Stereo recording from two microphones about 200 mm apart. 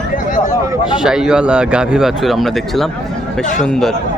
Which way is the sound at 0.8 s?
5° right (ahead or behind).